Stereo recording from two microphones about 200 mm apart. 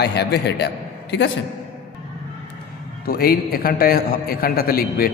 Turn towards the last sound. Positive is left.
turn(degrees=50)  # may be behind; listen again after turning